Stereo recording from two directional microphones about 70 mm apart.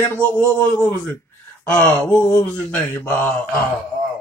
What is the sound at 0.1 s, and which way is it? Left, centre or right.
Speech, left.